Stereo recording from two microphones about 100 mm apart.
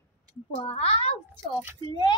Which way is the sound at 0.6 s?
75° left (ahead or behind).